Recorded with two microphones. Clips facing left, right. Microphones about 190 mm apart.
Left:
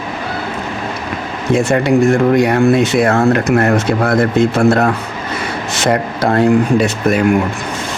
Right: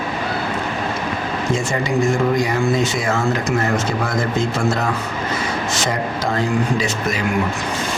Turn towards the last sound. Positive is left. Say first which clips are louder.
# left 8 dB
turn(degrees=55)  # may be behind; listen again after turning